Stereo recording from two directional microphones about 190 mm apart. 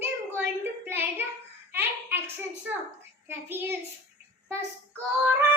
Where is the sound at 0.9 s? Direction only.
10° right (ahead or behind).